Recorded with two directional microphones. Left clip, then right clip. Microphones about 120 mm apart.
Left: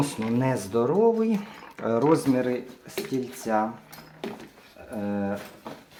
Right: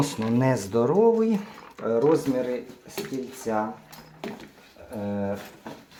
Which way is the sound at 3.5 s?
40° left (ahead or behind).